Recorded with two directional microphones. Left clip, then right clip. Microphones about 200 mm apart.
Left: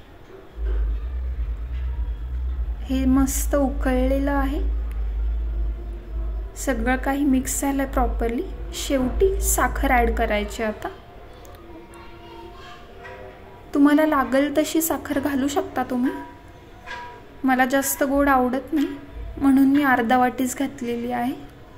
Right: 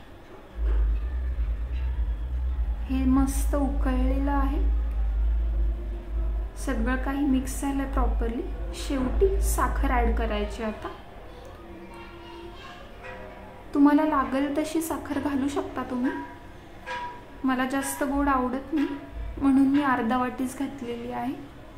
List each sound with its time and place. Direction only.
2.9 s a woman's voice: 25° left (ahead or behind)
6.6 s a woman's voice: 25° left (ahead or behind)
13.7 s a woman's voice: 25° left (ahead or behind)
17.5 s a woman's voice: 25° left (ahead or behind)